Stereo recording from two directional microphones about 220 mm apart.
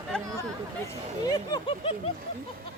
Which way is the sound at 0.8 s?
15° left (ahead or behind).